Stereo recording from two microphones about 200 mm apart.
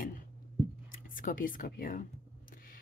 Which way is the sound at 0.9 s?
45° left (ahead or behind).